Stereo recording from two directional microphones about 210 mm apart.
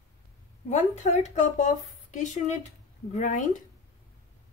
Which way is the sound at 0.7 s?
35° left (ahead or behind).